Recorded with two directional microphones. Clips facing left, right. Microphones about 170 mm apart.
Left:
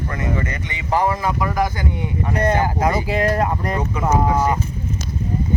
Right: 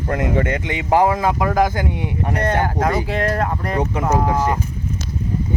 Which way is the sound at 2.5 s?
Centre (ahead or behind).